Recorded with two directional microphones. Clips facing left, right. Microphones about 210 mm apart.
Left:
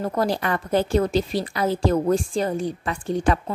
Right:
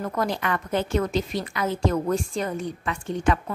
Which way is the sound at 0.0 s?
30° left (ahead or behind).